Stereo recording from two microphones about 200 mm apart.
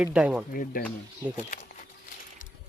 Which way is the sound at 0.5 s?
45° left (ahead or behind).